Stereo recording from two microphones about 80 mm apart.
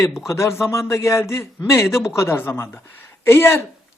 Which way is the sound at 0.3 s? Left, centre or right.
Left.